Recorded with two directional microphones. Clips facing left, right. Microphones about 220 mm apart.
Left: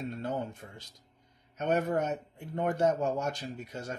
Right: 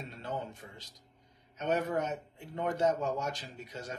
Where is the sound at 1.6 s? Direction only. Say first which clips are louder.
Left 3 dB; 50° left (ahead or behind).